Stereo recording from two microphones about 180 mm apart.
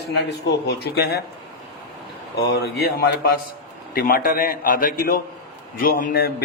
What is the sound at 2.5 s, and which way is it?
A man's voice, 60° left (ahead or behind).